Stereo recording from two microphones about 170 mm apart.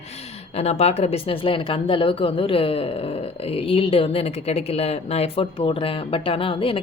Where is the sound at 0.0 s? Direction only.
40° left (ahead or behind).